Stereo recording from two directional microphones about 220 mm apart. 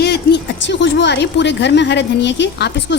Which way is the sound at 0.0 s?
50° left (ahead or behind).